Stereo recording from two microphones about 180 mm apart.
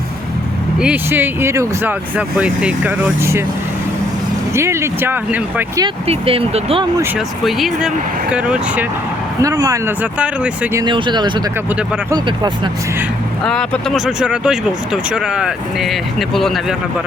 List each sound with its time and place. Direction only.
0.8 s speech: 10° right (ahead or behind)
4.5 s speech: 15° right (ahead or behind)
5.8 s speech: 30° right (ahead or behind)
7.4 s speech: centre (ahead or behind)
9.4 s speech: 20° right (ahead or behind)
10.8 s speech: 25° right (ahead or behind)
13.4 s speech: 5° left (ahead or behind)